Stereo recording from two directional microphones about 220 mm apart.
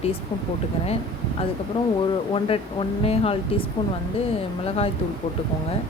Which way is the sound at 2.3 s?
25° left (ahead or behind).